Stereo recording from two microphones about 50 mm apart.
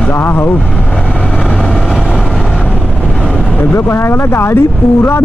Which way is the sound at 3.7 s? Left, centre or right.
Left.